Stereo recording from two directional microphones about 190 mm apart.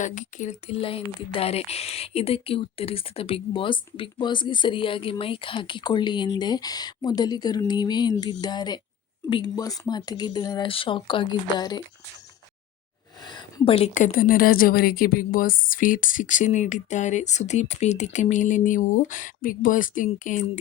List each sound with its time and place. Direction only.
0.0 s speech: 40° left (ahead or behind); by 11.8 s 20° left (ahead or behind)
13.2 s a woman's voice: 25° left (ahead or behind); by 20.4 s 40° left (ahead or behind)